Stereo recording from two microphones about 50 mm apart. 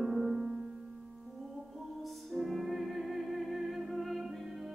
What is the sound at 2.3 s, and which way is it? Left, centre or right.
Music, centre.